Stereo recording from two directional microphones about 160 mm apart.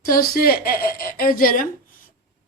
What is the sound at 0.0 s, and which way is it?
A woman's voice, 65° left (ahead or behind).